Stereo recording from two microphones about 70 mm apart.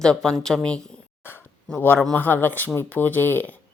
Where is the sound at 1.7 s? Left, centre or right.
Left.